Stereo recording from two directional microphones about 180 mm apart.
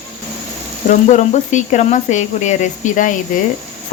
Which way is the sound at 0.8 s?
40° left (ahead or behind).